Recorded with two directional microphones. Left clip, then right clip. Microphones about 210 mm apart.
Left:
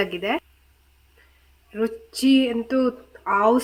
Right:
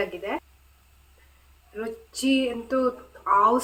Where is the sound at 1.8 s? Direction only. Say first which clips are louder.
Left 6 dB; 50° left (ahead or behind).